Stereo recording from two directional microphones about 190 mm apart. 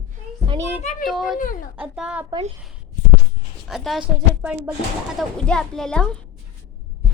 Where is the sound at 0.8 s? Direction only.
40° left (ahead or behind).